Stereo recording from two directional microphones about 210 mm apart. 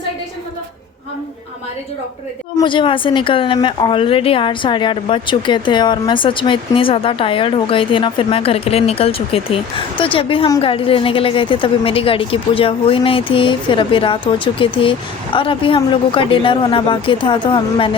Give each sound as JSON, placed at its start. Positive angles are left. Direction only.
{"t": 2.6, "sound": "a woman's voice", "side_deg": 25}